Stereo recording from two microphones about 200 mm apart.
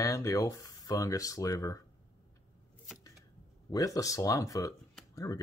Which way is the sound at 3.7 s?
15° left (ahead or behind).